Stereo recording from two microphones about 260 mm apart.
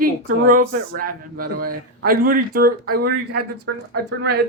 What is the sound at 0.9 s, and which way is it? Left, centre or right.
Speech, right.